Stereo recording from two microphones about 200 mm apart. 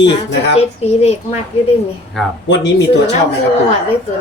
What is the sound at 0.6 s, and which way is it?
Speech, 30° left (ahead or behind).